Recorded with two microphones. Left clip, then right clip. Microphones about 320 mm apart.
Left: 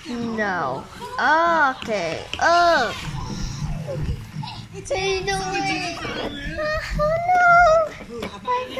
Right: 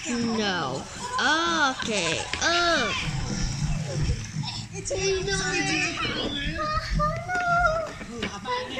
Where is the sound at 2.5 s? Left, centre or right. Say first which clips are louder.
Left 6 dB; left.